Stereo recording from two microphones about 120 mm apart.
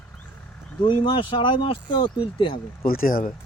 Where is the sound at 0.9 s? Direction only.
40° left (ahead or behind).